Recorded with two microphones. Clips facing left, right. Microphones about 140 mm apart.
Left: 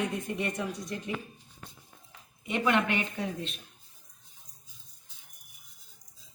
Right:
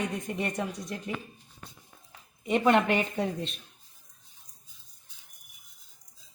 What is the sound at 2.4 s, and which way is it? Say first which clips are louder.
Speech: right 4 dB; 35° right (ahead or behind).